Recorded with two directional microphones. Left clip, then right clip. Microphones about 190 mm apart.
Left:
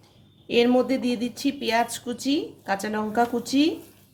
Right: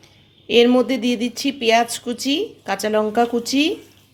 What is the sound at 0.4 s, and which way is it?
Speech, 25° right (ahead or behind).